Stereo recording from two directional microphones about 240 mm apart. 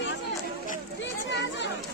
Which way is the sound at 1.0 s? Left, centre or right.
Left.